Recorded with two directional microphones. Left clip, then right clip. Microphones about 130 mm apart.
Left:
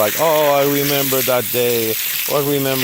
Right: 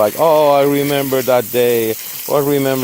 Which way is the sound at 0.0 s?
35° right (ahead or behind).